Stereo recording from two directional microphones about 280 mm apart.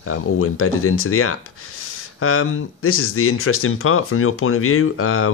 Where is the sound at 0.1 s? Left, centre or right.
Left.